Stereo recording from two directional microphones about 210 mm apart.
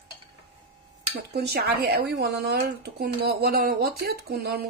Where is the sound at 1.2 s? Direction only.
50° right (ahead or behind).